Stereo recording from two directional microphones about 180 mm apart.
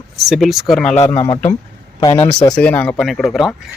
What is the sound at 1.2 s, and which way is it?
Speech, 30° left (ahead or behind).